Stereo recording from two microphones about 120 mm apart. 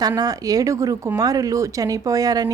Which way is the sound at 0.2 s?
30° right (ahead or behind).